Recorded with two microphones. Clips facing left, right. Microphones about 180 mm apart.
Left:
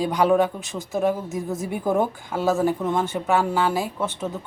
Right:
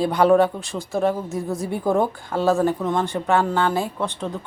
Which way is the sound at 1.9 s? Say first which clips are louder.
Right 1 dB; 10° left (ahead or behind).